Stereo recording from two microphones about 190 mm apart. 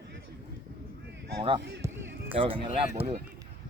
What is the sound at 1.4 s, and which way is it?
Speech, 25° right (ahead or behind).